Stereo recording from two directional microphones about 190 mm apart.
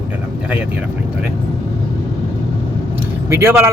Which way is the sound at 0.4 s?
5° right (ahead or behind).